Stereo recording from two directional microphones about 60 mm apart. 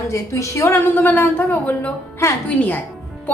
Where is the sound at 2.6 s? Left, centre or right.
Left.